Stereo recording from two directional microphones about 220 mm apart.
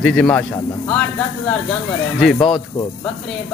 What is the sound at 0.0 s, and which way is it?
Speech, 5° left (ahead or behind).